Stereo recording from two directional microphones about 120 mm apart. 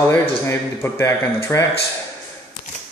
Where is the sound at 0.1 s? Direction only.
20° left (ahead or behind).